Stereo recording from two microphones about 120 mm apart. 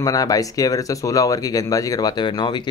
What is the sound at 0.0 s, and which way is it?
Speech, 30° left (ahead or behind).